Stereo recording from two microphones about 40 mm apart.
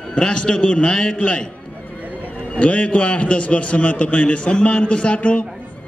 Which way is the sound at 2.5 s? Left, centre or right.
Left.